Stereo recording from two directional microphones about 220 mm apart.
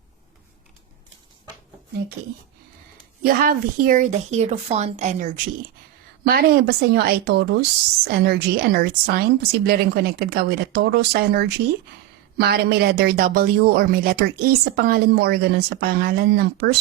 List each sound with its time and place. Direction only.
3.2 s a woman's voice: 40° right (ahead or behind)
6.2 s speech: 45° right (ahead or behind)